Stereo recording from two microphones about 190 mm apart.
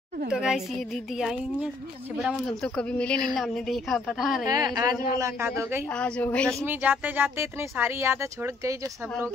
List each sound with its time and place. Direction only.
0.3 s a woman's voice: centre (ahead or behind)
4.5 s a woman's voice: 20° right (ahead or behind)
5.9 s a woman's voice: 5° left (ahead or behind)
6.6 s speech: 10° right (ahead or behind)